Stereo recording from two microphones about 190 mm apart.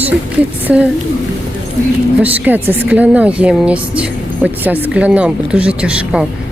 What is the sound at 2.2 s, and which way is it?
A woman's voice, 10° right (ahead or behind).